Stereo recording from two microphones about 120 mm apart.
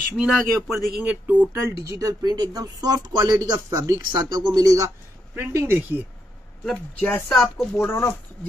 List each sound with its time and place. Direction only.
0.2 s a man's voice: centre (ahead or behind); by 6.0 s 15° right (ahead or behind)
6.6 s speech: 5° left (ahead or behind)
7.3 s speech: 20° left (ahead or behind)